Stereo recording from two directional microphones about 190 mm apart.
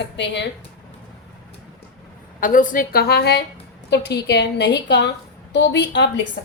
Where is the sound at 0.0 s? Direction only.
65° left (ahead or behind).